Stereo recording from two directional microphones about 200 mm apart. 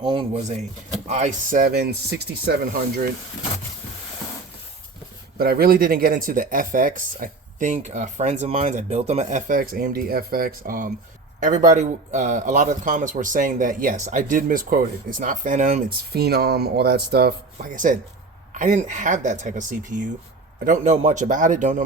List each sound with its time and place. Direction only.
0.0 s speech: 25° right (ahead or behind); by 3.1 s 50° right (ahead or behind)
5.4 s a man's voice: 50° right (ahead or behind)